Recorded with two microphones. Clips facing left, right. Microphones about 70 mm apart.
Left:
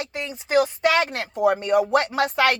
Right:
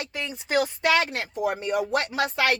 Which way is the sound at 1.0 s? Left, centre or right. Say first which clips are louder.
Left 6 dB; left.